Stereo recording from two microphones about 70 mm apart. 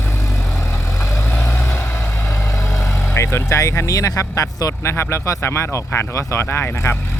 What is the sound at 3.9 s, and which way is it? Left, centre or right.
Speech, left.